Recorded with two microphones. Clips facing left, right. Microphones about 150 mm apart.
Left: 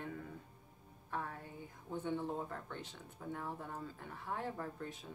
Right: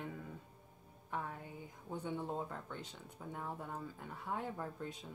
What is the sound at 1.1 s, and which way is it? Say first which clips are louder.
Speech: even; 15° right (ahead or behind).